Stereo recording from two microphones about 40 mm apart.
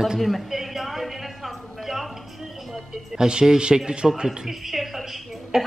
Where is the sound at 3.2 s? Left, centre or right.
Centre.